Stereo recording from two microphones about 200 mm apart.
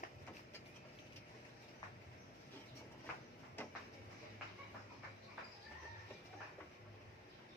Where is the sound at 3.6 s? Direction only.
10° left (ahead or behind).